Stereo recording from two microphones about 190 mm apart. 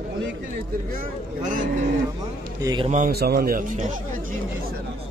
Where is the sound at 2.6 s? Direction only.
25° right (ahead or behind).